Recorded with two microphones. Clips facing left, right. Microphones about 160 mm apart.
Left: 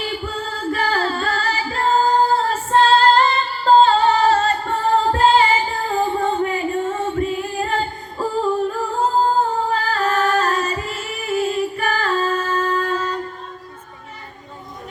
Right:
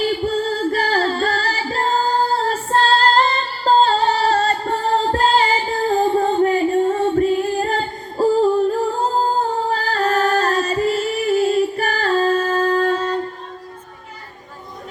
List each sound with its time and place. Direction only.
0.0 s music: 40° right (ahead or behind)
2.3 s female singing: 35° right (ahead or behind)
9.6 s music: 35° right (ahead or behind)